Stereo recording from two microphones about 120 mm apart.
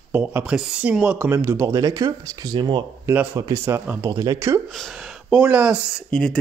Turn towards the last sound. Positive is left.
turn(degrees=5)  # may be behind; listen again after turning